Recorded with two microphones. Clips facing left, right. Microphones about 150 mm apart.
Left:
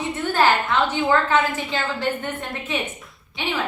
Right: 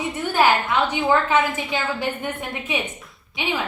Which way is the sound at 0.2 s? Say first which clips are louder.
Even; 15° right (ahead or behind).